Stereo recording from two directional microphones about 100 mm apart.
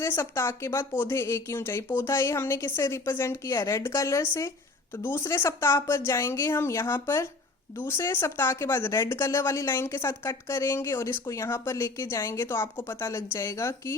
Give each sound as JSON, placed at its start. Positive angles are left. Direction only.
{"t": 0.0, "sound": "speech", "side_deg": 25}